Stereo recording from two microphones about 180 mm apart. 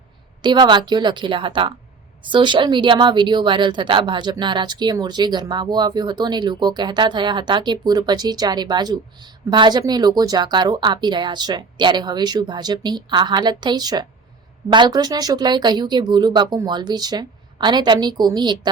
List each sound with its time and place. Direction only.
0.4 s a woman's voice: 25° right (ahead or behind)